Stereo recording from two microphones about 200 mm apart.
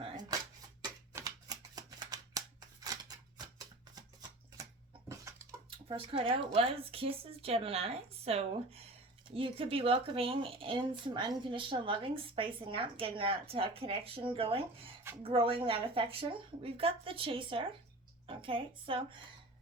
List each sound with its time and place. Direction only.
0.3 s a sound: 15° right (ahead or behind)
5.0 s bathtub: 15° right (ahead or behind)
6.1 s speech: 25° right (ahead or behind)